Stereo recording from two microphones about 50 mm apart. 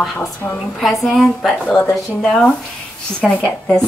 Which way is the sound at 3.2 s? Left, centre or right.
Left.